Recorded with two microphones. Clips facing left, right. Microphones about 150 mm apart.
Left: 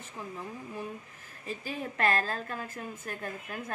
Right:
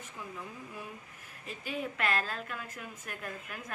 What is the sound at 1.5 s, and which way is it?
A woman's voice, 35° left (ahead or behind).